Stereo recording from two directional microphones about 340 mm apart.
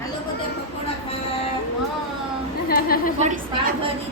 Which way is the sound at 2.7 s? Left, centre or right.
Left.